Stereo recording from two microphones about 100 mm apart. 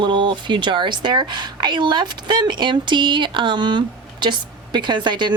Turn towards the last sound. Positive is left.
turn(degrees=-50)  # may be behind; listen again after turning